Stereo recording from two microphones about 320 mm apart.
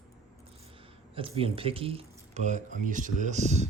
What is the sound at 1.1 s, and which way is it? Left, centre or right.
Speech, centre.